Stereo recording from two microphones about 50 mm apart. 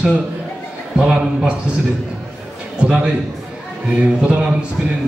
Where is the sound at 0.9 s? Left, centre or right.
Centre.